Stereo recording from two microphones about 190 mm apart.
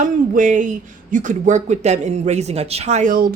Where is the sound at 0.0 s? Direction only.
45° right (ahead or behind).